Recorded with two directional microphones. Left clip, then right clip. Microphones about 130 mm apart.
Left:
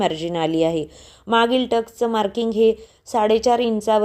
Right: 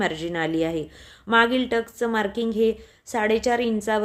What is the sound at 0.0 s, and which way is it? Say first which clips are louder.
A woman's voice: left 4 dB; 20° left (ahead or behind).